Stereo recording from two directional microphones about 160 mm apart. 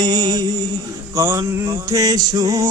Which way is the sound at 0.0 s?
25° right (ahead or behind).